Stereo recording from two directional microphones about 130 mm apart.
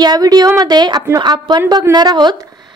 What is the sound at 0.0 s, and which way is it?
A woman's voice, 30° right (ahead or behind).